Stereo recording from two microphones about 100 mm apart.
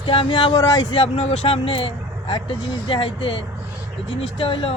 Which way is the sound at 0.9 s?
80° left.